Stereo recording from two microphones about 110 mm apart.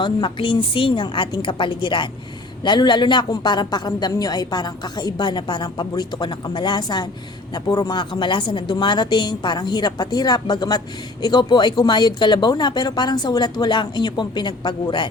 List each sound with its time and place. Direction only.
0.0 s a woman's voice: 50° left (ahead or behind)
7.9 s a woman's voice: 45° left (ahead or behind)